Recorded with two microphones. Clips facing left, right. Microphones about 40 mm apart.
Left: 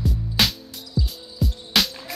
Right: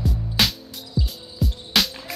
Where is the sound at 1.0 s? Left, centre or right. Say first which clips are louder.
Even; right.